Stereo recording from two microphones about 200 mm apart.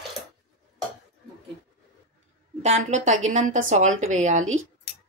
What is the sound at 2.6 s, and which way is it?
Speech, 35° right (ahead or behind).